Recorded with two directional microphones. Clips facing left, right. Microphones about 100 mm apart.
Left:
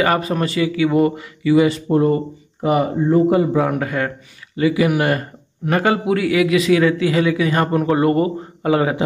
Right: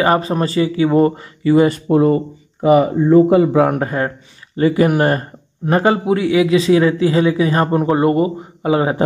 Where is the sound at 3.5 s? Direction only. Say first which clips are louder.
Right 4 dB; 55° right (ahead or behind).